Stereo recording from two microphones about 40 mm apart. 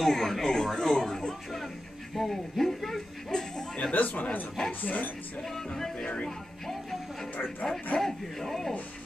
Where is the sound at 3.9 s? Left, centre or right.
Left.